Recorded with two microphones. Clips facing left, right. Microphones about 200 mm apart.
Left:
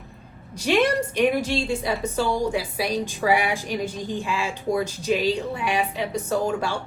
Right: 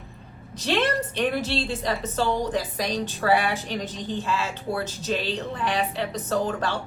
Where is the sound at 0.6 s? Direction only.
15° left (ahead or behind).